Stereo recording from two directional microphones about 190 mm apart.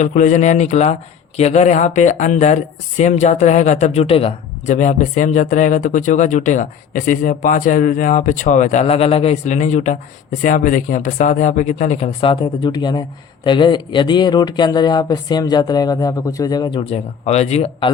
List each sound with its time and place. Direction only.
0.0 s speech: 40° left (ahead or behind)